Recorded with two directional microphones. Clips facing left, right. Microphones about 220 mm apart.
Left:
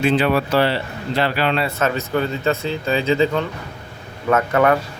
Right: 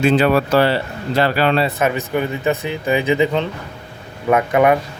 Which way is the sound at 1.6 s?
15° right (ahead or behind).